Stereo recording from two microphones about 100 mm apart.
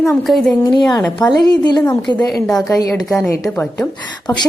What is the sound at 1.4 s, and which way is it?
Speech, 45° left (ahead or behind).